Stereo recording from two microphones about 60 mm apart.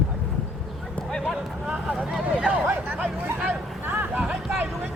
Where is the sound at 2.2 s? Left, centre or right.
Right.